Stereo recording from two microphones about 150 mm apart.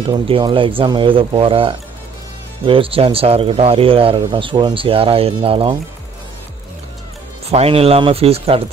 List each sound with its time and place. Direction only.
0.1 s speech: 35° right (ahead or behind)
7.4 s speech: 45° right (ahead or behind)